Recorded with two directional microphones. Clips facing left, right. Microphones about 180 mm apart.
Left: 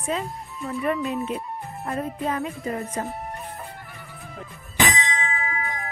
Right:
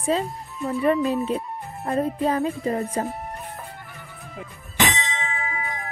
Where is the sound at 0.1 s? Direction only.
30° right (ahead or behind).